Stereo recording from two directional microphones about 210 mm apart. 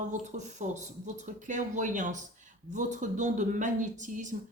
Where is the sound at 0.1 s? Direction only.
35° right (ahead or behind).